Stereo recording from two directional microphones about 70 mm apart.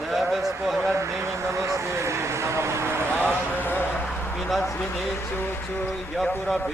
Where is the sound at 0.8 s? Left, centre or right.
Right.